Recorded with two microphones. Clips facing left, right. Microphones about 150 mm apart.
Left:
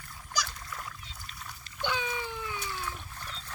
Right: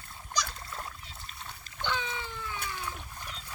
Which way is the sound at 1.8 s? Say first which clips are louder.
Left 2 dB; 10° left (ahead or behind).